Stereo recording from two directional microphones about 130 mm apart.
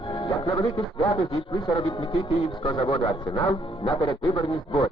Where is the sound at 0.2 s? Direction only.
25° left (ahead or behind).